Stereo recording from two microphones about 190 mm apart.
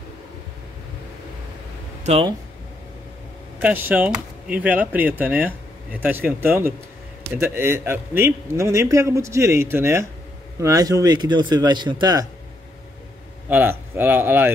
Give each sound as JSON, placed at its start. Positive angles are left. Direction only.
{"t": 2.0, "sound": "speech", "side_deg": -30}
{"t": 3.5, "sound": "a man's voice", "side_deg": -10}
{"t": 13.5, "sound": "a man's voice", "side_deg": -10}